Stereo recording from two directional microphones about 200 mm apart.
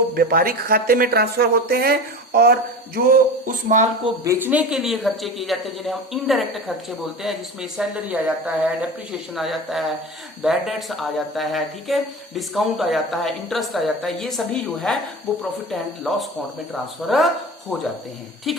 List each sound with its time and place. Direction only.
0.1 s speech: 50° right (ahead or behind)
3.4 s speech: 40° right (ahead or behind)
4.0 s speech: 15° right (ahead or behind)